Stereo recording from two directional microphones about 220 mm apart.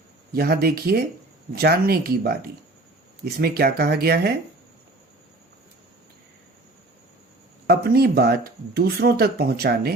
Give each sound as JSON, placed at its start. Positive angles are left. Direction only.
{"t": 0.3, "sound": "speech", "side_deg": -45}
{"t": 7.7, "sound": "speech", "side_deg": -45}